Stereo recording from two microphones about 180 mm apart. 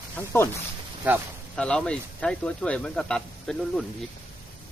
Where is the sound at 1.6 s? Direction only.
5° left (ahead or behind).